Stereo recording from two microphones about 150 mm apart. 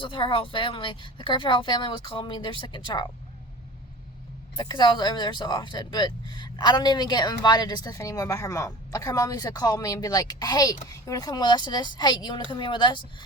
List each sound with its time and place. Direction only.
0.0 s speech: 35° left (ahead or behind)
4.5 s speech: 30° left (ahead or behind)